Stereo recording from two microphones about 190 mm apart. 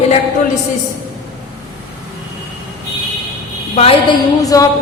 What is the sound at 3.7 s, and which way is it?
Speech, 25° left (ahead or behind).